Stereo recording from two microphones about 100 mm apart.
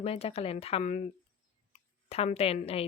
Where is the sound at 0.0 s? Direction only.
80° left.